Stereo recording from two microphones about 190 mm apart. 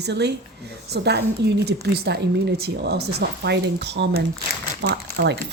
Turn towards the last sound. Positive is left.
turn(degrees=-55)  # may be behind; listen again after turning